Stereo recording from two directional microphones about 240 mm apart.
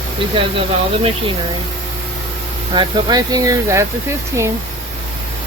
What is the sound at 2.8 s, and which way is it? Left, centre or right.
Speech, centre.